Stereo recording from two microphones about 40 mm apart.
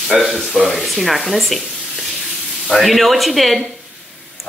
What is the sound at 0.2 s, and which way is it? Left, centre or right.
Speech, centre.